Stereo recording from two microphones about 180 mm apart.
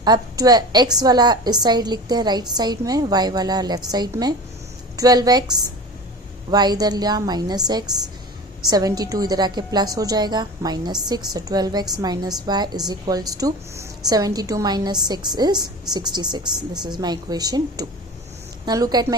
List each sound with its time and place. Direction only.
0.0 s a woman's voice: 20° right (ahead or behind)